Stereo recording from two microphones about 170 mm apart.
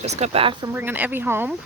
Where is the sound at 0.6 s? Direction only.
10° right (ahead or behind).